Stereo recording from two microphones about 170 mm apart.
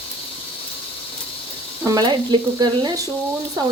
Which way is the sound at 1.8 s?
25° right (ahead or behind).